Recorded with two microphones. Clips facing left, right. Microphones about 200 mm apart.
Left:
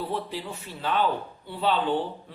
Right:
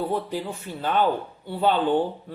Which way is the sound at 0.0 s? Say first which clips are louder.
Right 5 dB; 45° right (ahead or behind).